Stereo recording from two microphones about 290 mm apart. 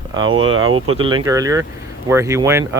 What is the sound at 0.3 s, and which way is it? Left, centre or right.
Speech, right.